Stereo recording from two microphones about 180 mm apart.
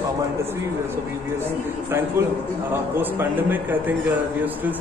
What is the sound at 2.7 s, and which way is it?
A man's voice, 10° right (ahead or behind).